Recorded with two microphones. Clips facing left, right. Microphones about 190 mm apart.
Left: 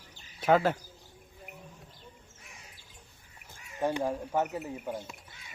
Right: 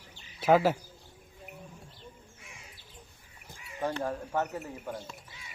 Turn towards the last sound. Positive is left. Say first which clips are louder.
# left 2 dB
turn(degrees=15)  # may be behind; listen again after turning